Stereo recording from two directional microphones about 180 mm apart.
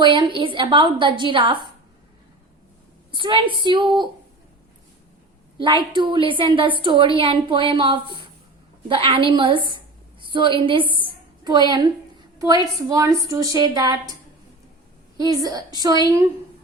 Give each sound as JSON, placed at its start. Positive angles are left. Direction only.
{"t": 0.0, "sound": "a woman's voice", "side_deg": -25}
{"t": 3.1, "sound": "a woman's voice", "side_deg": -25}
{"t": 5.5, "sound": "a woman's voice", "side_deg": -25}
{"t": 15.2, "sound": "a woman's voice", "side_deg": -20}